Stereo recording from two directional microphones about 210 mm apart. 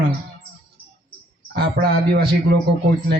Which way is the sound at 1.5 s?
50° right (ahead or behind).